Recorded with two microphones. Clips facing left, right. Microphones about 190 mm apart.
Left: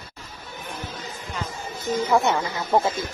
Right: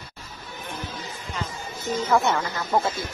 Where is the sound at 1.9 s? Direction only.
15° left (ahead or behind).